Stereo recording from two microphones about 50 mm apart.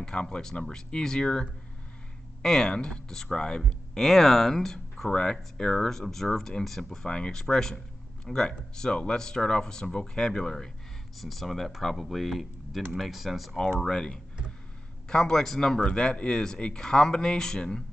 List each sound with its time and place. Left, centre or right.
0.0 s speech: centre
13.6 s speech: centre